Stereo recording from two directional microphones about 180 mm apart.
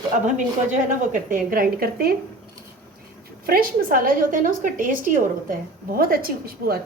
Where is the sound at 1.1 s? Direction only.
50° right (ahead or behind).